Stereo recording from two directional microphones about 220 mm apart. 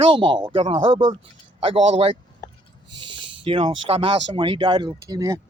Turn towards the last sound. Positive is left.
turn(degrees=-15)  # may be behind; listen again after turning